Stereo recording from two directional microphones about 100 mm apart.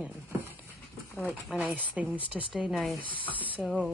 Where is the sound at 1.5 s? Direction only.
15° right (ahead or behind).